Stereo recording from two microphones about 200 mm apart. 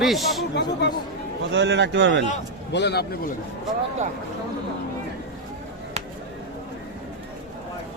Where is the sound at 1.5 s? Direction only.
60° right (ahead or behind).